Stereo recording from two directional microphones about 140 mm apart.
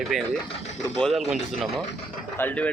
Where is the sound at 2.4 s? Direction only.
10° left (ahead or behind).